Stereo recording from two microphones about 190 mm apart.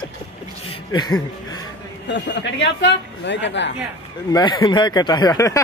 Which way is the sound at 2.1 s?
70° left (ahead or behind).